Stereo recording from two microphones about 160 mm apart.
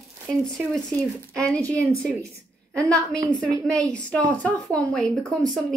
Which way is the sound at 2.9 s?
20° right (ahead or behind).